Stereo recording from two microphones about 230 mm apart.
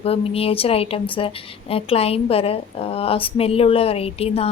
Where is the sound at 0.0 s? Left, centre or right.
Left.